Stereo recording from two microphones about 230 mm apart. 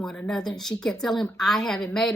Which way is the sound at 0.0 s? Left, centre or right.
Centre.